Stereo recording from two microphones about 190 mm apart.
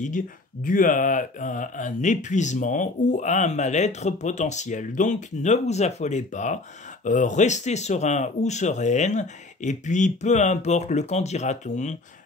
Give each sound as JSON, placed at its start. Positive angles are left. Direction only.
{"t": 0.7, "sound": "speech", "side_deg": 45}